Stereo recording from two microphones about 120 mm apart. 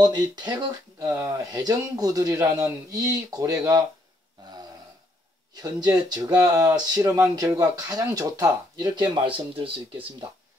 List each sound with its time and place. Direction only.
0.0 s speech: 35° right (ahead or behind)
0.9 s speech: 25° right (ahead or behind)
5.5 s speech: 35° right (ahead or behind)